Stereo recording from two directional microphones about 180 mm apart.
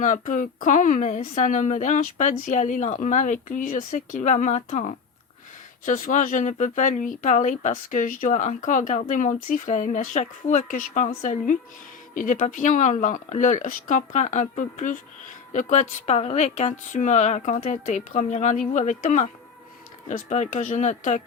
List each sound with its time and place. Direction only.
0.0 s a woman's voice: 45° left (ahead or behind)